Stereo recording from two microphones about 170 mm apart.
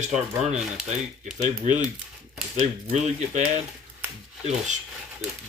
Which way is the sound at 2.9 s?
45° right (ahead or behind).